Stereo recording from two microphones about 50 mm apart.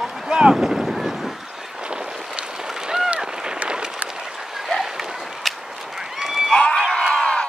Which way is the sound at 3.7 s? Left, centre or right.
Centre.